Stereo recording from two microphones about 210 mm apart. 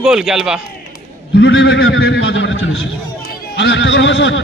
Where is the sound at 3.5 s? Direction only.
60° left (ahead or behind).